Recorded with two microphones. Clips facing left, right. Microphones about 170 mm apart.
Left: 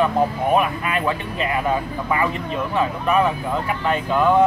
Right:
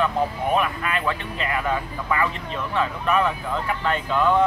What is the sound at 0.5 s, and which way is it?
Speech, 15° left (ahead or behind).